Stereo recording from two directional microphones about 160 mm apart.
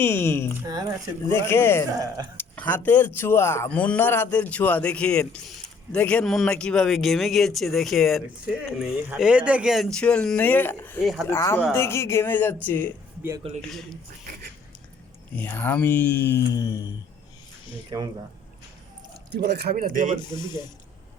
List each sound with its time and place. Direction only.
0.0 s speech: 15° left (ahead or behind)
11.0 s speech: centre (ahead or behind)
11.3 s speech: 15° left (ahead or behind)
15.4 s speech: 10° left (ahead or behind)
16.5 s a sound: 20° left (ahead or behind)
17.9 s speech: 25° right (ahead or behind)
19.3 s a man's voice: 90° right; by 20.1 s 55° right (ahead or behind)
20.3 s a sound: 25° left (ahead or behind)